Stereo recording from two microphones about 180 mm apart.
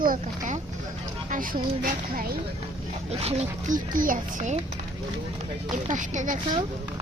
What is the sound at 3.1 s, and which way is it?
Speech, 35° right (ahead or behind).